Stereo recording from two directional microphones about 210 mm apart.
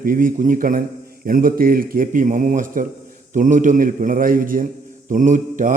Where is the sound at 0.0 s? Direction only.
40° right (ahead or behind).